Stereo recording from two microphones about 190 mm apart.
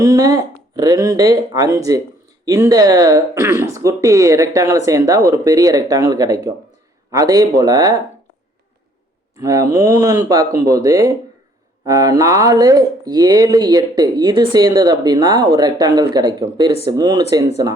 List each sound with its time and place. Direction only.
0.0 s speech: 20° right (ahead or behind)
9.4 s speech: 15° right (ahead or behind)